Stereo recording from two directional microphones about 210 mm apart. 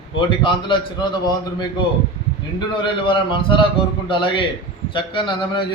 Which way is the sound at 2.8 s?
25° left (ahead or behind).